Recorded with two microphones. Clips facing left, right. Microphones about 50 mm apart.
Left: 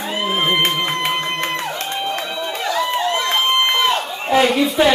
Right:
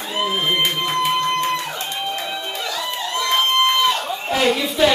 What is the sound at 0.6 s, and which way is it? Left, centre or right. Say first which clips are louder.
Music: left 1 dB; left.